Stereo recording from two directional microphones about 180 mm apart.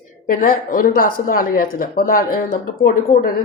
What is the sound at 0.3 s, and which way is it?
Speech, 50° left (ahead or behind).